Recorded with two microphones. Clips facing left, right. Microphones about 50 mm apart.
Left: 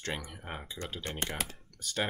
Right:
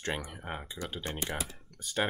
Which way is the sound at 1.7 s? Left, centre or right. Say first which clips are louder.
Right 2 dB; centre.